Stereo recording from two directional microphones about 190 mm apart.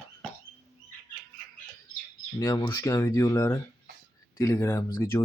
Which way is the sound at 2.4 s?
20° left (ahead or behind).